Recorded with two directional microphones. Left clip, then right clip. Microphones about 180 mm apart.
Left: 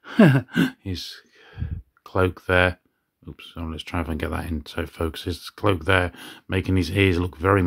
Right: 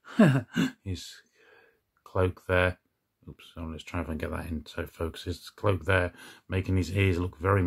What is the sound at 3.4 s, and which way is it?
Speech, 25° left (ahead or behind).